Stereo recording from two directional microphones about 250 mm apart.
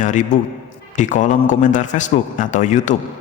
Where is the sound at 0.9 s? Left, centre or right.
Left.